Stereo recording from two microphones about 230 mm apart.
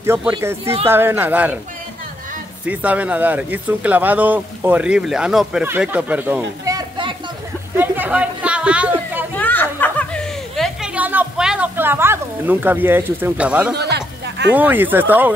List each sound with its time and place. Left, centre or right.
0.0 s speech: centre
2.6 s speech: centre
7.7 s a sound: centre
9.3 s chuckle: centre
13.7 s music: right
14.5 s speech: centre